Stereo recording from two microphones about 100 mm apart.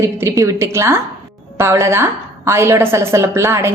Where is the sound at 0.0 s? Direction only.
25° right (ahead or behind).